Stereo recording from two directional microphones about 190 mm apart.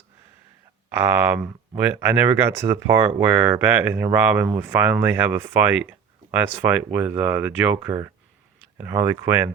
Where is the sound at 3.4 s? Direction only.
10° right (ahead or behind).